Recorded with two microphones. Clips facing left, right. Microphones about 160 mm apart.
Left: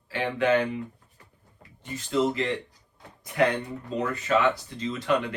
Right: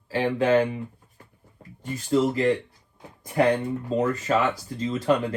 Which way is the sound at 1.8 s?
40° right (ahead or behind).